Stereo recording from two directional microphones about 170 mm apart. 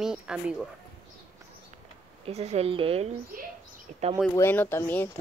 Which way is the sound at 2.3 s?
40° right (ahead or behind).